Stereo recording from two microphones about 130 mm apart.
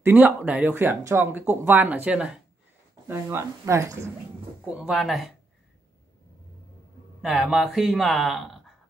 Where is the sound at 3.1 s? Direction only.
20° right (ahead or behind).